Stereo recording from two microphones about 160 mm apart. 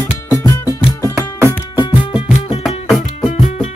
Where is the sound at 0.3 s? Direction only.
20° left (ahead or behind).